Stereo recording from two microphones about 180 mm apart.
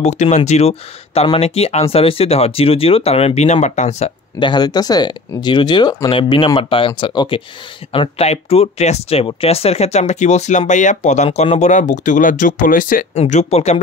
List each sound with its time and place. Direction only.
0.0 s speech: 40° left (ahead or behind)
4.4 s speech: 25° left (ahead or behind); by 13.0 s 50° left (ahead or behind)
13.1 s speech: 35° left (ahead or behind)